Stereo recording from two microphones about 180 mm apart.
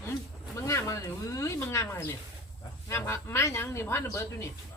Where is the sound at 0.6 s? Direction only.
15° left (ahead or behind).